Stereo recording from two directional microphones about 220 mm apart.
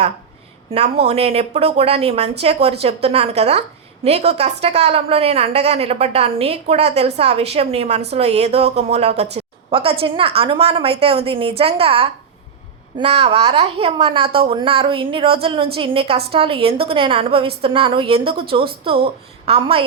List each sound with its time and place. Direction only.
0.7 s a woman's voice: 30° right (ahead or behind)